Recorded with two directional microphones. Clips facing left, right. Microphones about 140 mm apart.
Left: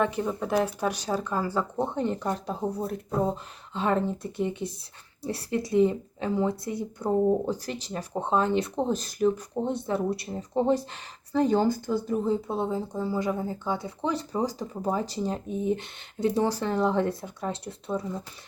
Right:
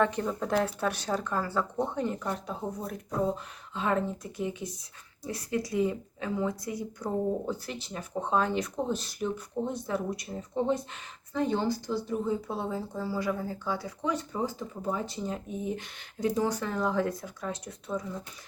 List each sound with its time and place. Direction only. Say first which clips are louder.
0.0 s speech: left 1 dB; 10° left (ahead or behind)
2.0 s speech: left 3 dB; 25° left (ahead or behind)
8.3 s speech: left 3 dB; 25° left (ahead or behind)
8.9 s speech: left 7 dB; 45° left (ahead or behind)
9.6 s speech: left 6 dB; 25° left (ahead or behind); by 12.1 s 50° left (ahead or behind)
12.2 s speech: left 4 dB; 30° left (ahead or behind)
12.5 s speech: left 5 dB; 20° left (ahead or behind)